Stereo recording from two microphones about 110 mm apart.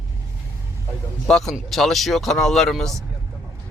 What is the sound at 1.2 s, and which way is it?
Speech, 5° left (ahead or behind).